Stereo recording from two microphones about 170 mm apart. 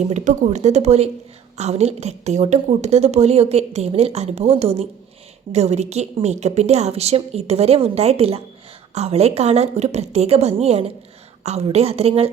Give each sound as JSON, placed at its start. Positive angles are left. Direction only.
{"t": 0.0, "sound": "a woman's voice", "side_deg": -45}